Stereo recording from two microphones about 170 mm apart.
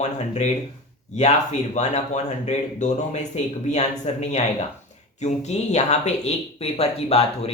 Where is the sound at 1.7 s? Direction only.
45° left (ahead or behind).